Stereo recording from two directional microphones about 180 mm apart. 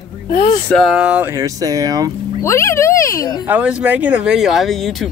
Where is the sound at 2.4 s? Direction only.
15° left (ahead or behind).